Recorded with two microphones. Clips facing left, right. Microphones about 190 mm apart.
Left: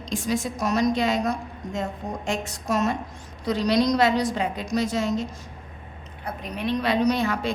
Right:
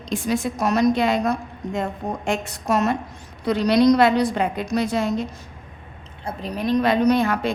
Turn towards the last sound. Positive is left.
turn(degrees=-55)  # may be behind; listen again after turning